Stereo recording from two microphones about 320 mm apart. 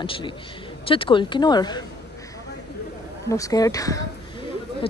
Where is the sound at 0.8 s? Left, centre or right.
Centre.